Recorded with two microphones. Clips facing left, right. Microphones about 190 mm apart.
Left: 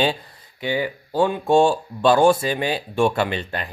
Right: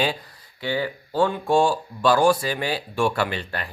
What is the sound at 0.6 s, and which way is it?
A man's voice, 15° left (ahead or behind).